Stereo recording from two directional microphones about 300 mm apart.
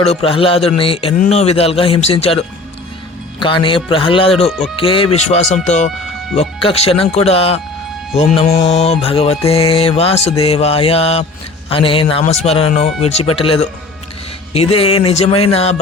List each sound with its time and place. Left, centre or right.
0.0 s mantra: centre
3.4 s speech: centre
5.1 s mantra: left